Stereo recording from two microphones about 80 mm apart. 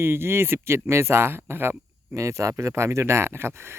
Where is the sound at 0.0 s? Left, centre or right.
Right.